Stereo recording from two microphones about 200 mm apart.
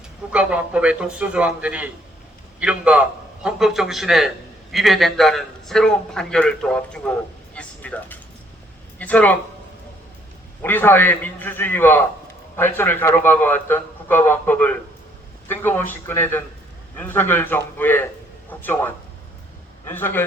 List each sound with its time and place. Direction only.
0.3 s a man's voice: 5° right (ahead or behind)
7.5 s vehicle: 5° left (ahead or behind)
9.0 s speech: 5° left (ahead or behind)
10.6 s a man's voice: 10° left (ahead or behind)